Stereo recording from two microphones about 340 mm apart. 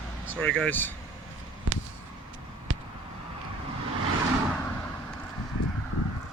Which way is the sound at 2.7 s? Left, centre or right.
Right.